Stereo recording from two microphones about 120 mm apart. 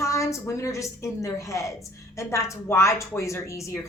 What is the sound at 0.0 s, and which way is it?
A woman's voice, 25° left (ahead or behind).